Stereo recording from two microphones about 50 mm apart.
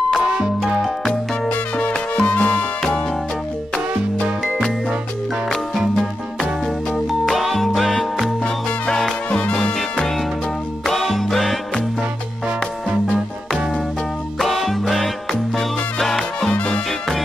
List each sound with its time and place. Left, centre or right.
0.2 s music: right
1.5 s music: left
7.1 s music: centre
9.3 s music: left
9.8 s music: centre
14.4 s music: centre
16.5 s music: left